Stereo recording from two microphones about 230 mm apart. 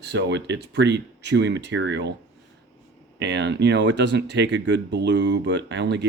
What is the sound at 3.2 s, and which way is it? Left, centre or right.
Speech, right.